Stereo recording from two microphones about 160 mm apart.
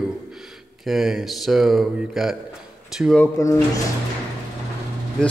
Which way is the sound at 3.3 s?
20° left (ahead or behind).